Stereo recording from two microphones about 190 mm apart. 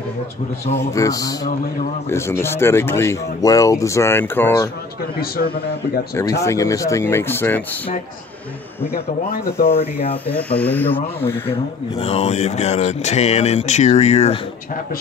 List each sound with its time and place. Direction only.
0.7 s speech: 15° left (ahead or behind)
6.1 s speech: 15° left (ahead or behind)
9.8 s speech: 30° left (ahead or behind)
10.3 s speech: 10° left (ahead or behind)
12.0 s speech: 35° left (ahead or behind)